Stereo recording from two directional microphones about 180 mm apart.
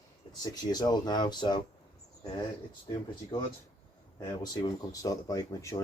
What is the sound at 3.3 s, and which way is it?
Speech, 25° left (ahead or behind).